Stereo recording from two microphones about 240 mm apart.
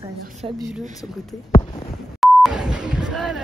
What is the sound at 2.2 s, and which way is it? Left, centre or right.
Beep, centre.